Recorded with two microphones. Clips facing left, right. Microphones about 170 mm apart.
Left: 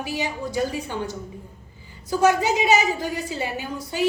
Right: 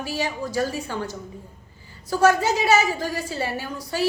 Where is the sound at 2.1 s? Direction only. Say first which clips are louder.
Even; 15° left (ahead or behind).